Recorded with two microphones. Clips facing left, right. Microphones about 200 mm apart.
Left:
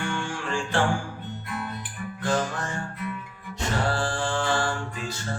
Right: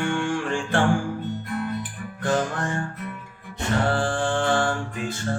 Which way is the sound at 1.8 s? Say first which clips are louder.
Right 2 dB; 55° right (ahead or behind).